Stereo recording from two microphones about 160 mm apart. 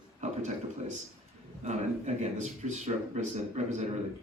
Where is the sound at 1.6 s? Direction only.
45° right (ahead or behind).